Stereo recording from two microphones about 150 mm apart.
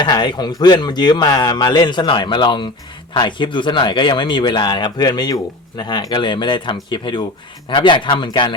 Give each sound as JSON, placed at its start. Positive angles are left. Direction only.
{"t": 0.0, "sound": "speech", "side_deg": 30}